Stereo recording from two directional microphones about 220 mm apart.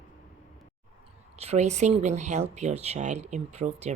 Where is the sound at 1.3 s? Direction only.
30° right (ahead or behind).